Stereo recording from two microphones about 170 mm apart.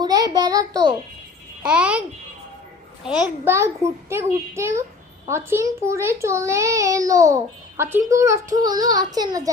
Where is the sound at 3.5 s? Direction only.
15° right (ahead or behind).